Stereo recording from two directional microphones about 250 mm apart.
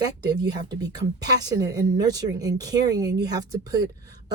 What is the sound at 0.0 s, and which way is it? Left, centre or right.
Speech, centre.